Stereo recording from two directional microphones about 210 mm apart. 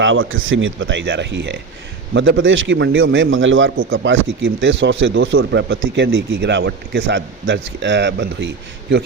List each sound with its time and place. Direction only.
0.0 s speech: 65° right (ahead or behind)